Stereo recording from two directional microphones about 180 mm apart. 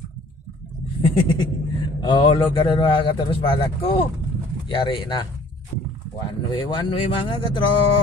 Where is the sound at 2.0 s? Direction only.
25° left (ahead or behind).